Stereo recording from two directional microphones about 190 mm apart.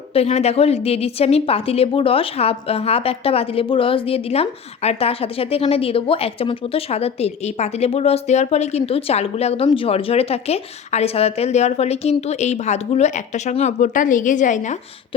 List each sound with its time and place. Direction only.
0.1 s a woman's voice: 30° left (ahead or behind)